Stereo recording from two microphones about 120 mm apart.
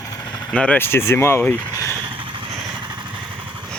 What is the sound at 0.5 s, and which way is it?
Speech, 10° left (ahead or behind).